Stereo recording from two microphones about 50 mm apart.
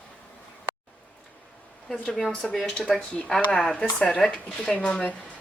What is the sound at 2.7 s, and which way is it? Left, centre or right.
A woman's voice, centre.